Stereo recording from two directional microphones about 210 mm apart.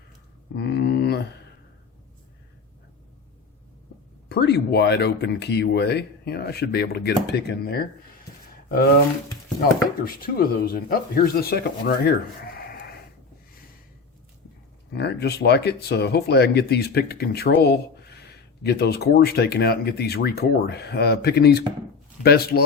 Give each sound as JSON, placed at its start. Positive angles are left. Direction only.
{"t": 0.5, "sound": "a sound", "side_deg": 50}
{"t": 4.3, "sound": "speech", "side_deg": 50}
{"t": 9.6, "sound": "speech", "side_deg": 45}
{"t": 14.9, "sound": "speech", "side_deg": 50}